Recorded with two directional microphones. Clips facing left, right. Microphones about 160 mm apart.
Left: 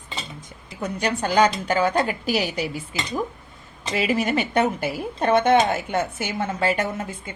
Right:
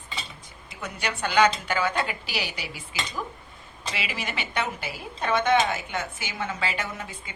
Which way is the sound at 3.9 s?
45° left (ahead or behind).